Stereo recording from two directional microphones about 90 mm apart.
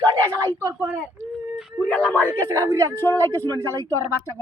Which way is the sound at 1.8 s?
15° left (ahead or behind).